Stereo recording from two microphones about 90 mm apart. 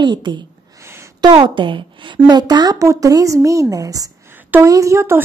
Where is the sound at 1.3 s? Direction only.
65° right (ahead or behind).